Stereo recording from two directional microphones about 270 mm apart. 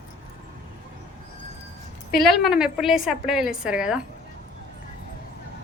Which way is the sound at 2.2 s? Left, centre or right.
Centre.